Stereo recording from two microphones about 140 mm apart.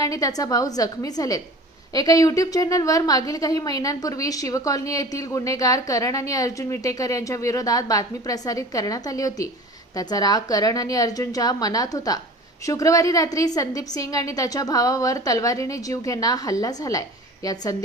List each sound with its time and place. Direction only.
0.0 s a woman's voice: 25° left (ahead or behind)